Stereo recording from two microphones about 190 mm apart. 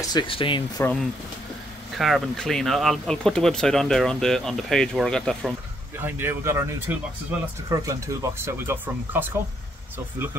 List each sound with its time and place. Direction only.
0.0 s speech: 20° left (ahead or behind)
2.0 s speech: centre (ahead or behind)
5.9 s speech: 10° right (ahead or behind)